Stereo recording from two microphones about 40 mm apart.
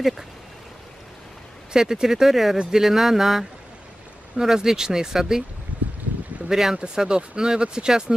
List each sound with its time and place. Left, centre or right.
1.7 s speech: centre
6.5 s speech: centre
6.8 s speech: right